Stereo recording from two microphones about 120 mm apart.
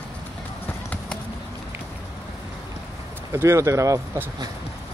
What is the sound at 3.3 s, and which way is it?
Speech, 25° right (ahead or behind).